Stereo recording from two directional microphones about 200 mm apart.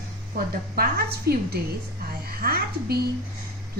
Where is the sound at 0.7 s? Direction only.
50° right (ahead or behind).